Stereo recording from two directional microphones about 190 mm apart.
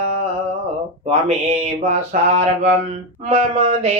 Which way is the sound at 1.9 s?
35° right (ahead or behind).